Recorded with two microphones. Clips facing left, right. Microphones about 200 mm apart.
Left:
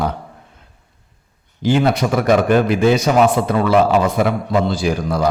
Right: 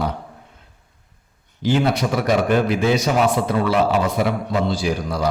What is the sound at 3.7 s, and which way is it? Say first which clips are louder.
A man's voice: left 6 dB; 50° left (ahead or behind).